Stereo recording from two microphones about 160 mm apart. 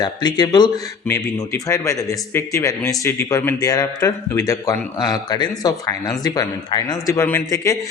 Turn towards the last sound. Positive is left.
turn(degrees=20)  # may be behind; listen again after turning